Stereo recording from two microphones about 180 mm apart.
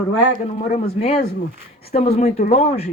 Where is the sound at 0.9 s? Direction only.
35° left (ahead or behind).